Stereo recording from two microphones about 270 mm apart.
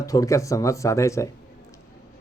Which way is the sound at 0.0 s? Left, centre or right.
Centre.